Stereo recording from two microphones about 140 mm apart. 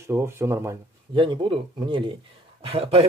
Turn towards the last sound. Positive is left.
turn(degrees=-40)  # may be behind; listen again after turning